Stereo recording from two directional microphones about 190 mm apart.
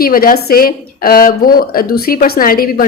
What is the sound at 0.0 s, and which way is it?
A woman's voice, 50° left (ahead or behind).